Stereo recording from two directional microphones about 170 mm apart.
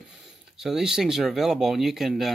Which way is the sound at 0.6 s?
Centre (ahead or behind).